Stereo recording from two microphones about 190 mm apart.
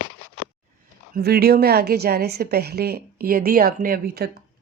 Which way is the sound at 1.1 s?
55° right (ahead or behind).